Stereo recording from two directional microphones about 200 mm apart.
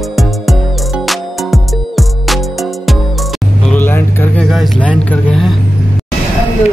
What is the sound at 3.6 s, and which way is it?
Vehicle, 10° left (ahead or behind).